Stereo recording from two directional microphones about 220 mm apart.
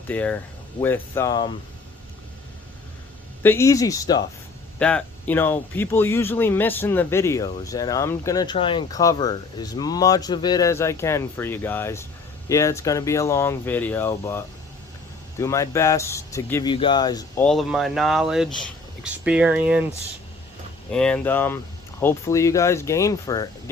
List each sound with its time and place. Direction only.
0.1 s speech: 5° left (ahead or behind)
3.4 s speech: 10° left (ahead or behind)
4.8 s speech: 5° left (ahead or behind)
17.4 s speech: centre (ahead or behind)
20.9 s speech: 5° left (ahead or behind)